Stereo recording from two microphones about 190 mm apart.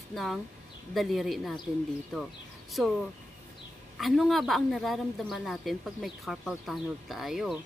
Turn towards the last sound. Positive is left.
turn(degrees=0)  # may be behind; listen again after turning